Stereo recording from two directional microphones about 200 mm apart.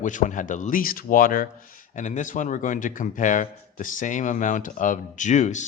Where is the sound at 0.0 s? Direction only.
40° left (ahead or behind).